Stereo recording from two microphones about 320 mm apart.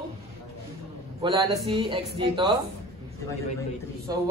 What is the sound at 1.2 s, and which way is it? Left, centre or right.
A man's voice, centre.